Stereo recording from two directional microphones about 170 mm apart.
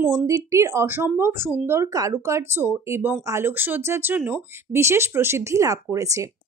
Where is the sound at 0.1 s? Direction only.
20° right (ahead or behind).